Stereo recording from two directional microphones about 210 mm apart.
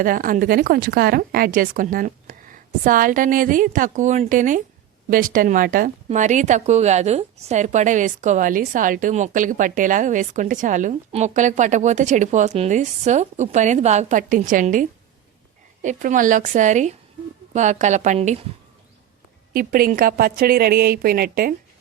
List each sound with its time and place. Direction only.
0.0 s a woman's voice: 40° right (ahead or behind)
19.5 s a woman's voice: 45° right (ahead or behind)